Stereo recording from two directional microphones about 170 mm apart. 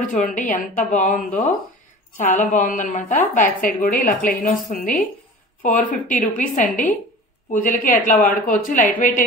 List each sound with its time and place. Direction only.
0.0 s a woman's voice: 45° left (ahead or behind)